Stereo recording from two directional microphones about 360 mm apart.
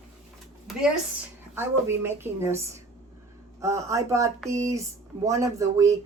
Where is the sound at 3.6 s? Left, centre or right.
Centre.